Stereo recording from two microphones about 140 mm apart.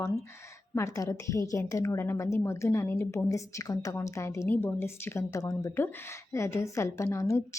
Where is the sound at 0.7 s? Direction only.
20° left (ahead or behind).